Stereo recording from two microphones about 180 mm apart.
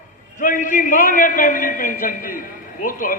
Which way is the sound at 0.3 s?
45° left (ahead or behind).